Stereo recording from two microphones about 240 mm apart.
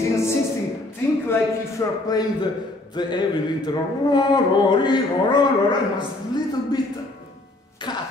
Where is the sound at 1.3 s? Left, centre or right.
Centre.